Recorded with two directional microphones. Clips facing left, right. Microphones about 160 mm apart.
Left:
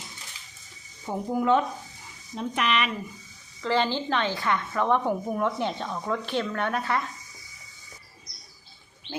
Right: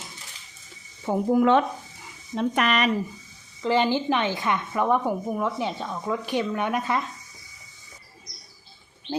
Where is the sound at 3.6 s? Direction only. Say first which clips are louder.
Right 3 dB; 15° right (ahead or behind).